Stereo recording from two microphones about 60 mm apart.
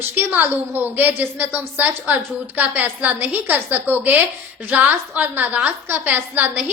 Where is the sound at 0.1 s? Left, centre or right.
Right.